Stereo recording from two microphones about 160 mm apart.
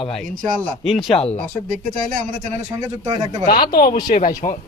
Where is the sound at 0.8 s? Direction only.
Centre (ahead or behind).